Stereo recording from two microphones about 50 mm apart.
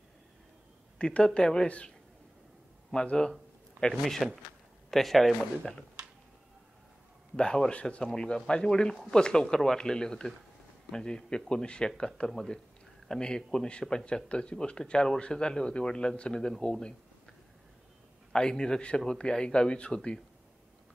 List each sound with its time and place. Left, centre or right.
0.9 s speech: centre
2.9 s a man's voice: centre
7.3 s speech: centre
18.3 s speech: centre